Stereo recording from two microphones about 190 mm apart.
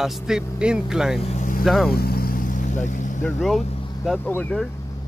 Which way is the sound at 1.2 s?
40° left (ahead or behind).